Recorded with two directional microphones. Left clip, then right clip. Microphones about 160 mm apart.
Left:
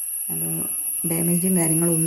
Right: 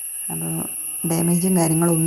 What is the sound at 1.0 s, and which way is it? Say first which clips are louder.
Speech: right 3 dB; 15° right (ahead or behind).